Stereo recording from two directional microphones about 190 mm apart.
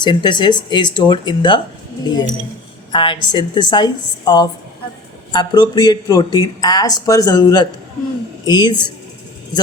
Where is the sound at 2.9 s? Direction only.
25° left (ahead or behind).